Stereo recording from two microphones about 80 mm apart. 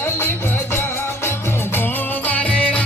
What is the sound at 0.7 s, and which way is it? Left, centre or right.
Music, left.